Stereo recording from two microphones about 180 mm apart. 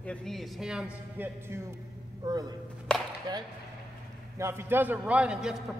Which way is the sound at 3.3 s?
20° right (ahead or behind).